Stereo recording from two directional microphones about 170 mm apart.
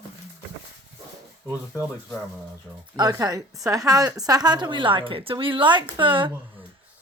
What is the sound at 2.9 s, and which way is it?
A woman's voice, 25° right (ahead or behind).